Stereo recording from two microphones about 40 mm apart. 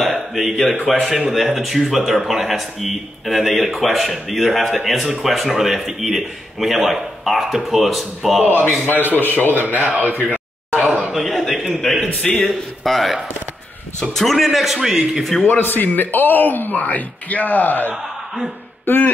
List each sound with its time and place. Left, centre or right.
0.0 s a sound: centre
1.0 s a man's voice: centre
8.5 s speech: left
9.8 s a man's voice: right
10.7 s a sound: right
11.1 s a man's voice: centre
14.9 s speech: centre
15.4 s speech: left
16.8 s speech: left
18.9 s a sound: left